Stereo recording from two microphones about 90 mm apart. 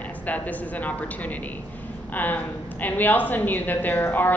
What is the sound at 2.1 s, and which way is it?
A woman's voice, 20° left (ahead or behind).